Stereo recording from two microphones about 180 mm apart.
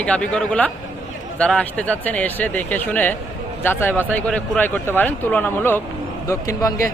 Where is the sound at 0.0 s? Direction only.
5° left (ahead or behind).